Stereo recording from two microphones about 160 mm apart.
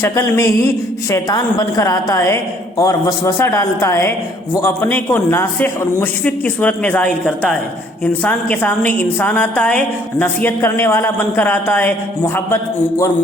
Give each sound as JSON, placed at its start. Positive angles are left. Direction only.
{"t": 0.0, "sound": "a woman's voice", "side_deg": 20}